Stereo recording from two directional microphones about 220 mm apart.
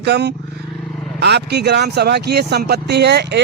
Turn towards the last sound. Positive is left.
turn(degrees=-50)  # may be behind; listen again after turning